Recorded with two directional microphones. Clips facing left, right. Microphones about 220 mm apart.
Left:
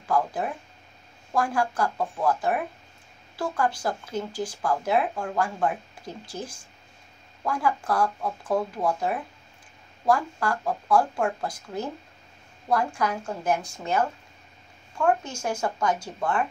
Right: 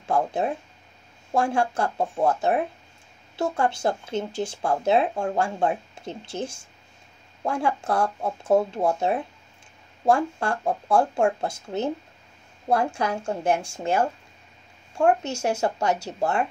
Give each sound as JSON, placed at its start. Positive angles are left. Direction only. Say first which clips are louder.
{"t": 0.1, "sound": "speech", "louder": "right 2 dB", "side_deg": -25}
{"t": 15.6, "sound": "speech", "louder": "right 2 dB", "side_deg": -25}